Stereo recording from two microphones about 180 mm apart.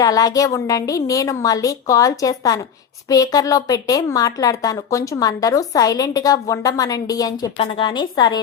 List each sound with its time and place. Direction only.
0.0 s a woman's voice: 20° left (ahead or behind)